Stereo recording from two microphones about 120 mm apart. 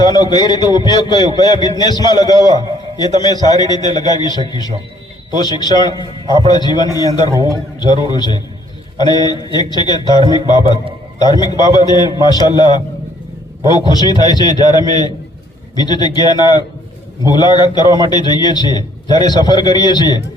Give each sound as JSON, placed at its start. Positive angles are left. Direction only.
{"t": 0.0, "sound": "a man's voice", "side_deg": 35}
{"t": 13.7, "sound": "a man's voice", "side_deg": 35}